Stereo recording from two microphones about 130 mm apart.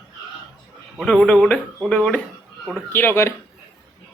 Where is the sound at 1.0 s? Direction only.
5° left (ahead or behind).